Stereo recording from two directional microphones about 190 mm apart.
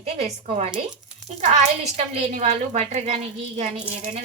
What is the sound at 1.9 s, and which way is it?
A woman's voice, 35° right (ahead or behind).